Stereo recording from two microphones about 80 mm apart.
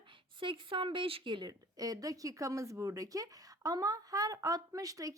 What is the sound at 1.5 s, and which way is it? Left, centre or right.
Speech, right.